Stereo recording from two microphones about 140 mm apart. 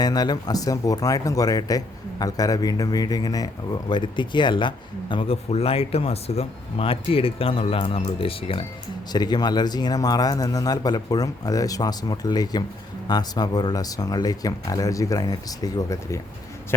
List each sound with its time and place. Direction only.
0.0 s speech: 30° left (ahead or behind)
9.1 s speech: 30° left (ahead or behind)